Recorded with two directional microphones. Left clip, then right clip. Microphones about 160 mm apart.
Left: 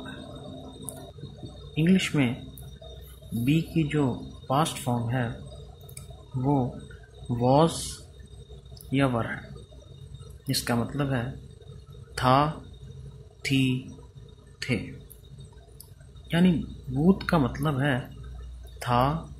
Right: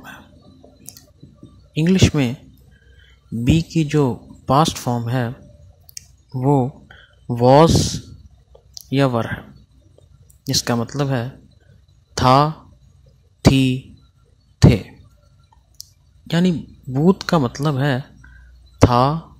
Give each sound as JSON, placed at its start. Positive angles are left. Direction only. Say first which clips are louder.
{"t": 1.7, "sound": "speech", "louder": "right 8 dB", "side_deg": -65}
{"t": 3.4, "sound": "speech", "louder": "right 7 dB", "side_deg": -65}
{"t": 5.9, "sound": "clicking", "louder": "right 8 dB", "side_deg": -60}
{"t": 7.4, "sound": "speech", "louder": "right 11 dB", "side_deg": -65}
{"t": 8.9, "sound": "speech", "louder": "right 7 dB", "side_deg": -60}
{"t": 10.4, "sound": "speech", "louder": "right 8 dB", "side_deg": -65}
{"t": 14.6, "sound": "a sound", "louder": "right 14 dB", "side_deg": -65}
{"t": 16.3, "sound": "a man's voice", "louder": "right 5 dB", "side_deg": -60}